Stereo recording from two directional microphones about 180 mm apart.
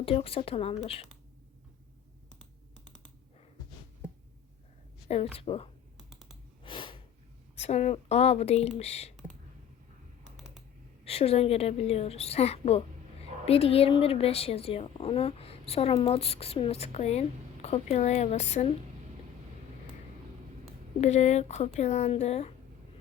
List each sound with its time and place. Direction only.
0.0 s a woman's voice: 30° left (ahead or behind)
5.0 s a woman's voice: 35° left (ahead or behind)
6.1 s computer keyboard: centre (ahead or behind)
6.6 s a sound: 25° left (ahead or behind)
7.5 s a woman's voice: 35° left (ahead or behind)
11.0 s a woman's voice: 35° left (ahead or behind)
21.0 s a woman's voice: 40° left (ahead or behind)